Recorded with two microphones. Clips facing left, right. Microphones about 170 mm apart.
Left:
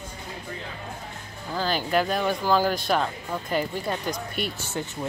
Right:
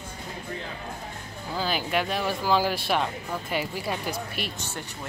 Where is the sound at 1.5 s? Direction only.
10° right (ahead or behind).